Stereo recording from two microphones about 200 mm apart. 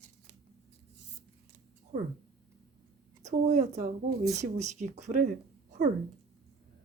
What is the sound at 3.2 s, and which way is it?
A woman's voice, 35° right (ahead or behind).